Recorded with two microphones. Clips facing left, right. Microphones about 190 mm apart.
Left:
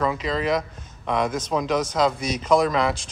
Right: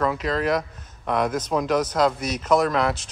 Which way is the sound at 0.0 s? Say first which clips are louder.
Right 1 dB; centre (ahead or behind).